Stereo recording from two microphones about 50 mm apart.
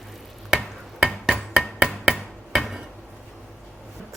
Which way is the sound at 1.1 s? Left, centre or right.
Centre.